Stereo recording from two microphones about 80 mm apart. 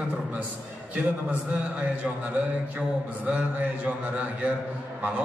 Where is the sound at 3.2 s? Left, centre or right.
Centre.